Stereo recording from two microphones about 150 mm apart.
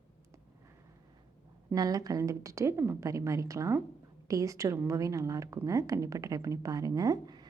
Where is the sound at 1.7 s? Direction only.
25° right (ahead or behind).